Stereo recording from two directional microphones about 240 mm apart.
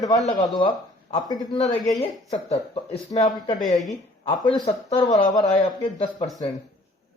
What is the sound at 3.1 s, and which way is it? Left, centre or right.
Speech, left.